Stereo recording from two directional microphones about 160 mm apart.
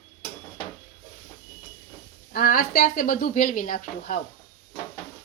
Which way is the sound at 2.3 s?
60° left (ahead or behind).